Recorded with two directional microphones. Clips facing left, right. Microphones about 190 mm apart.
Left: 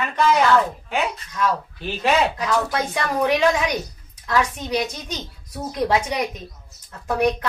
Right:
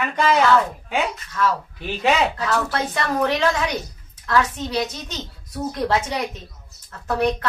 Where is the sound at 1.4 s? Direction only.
15° left (ahead or behind).